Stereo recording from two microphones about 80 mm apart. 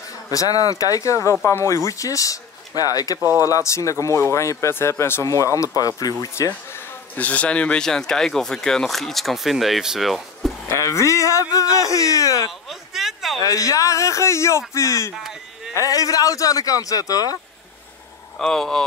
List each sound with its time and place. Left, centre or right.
0.3 s speech: left
3.2 s speech: right
3.4 s speech: left
7.2 s speech: centre
10.7 s speech: left
12.4 s a sound: centre
13.4 s speech: left
15.1 s a sound: centre
15.7 s speech: left
18.4 s speech: centre